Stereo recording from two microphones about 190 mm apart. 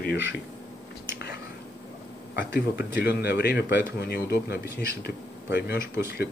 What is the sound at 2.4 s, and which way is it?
Speech, 60° left (ahead or behind).